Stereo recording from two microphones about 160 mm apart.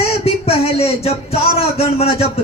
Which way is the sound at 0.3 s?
40° left (ahead or behind).